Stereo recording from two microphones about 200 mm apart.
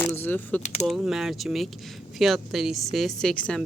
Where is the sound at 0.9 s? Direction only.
5° right (ahead or behind).